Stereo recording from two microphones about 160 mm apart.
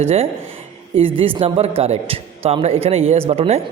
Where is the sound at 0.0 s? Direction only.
40° right (ahead or behind).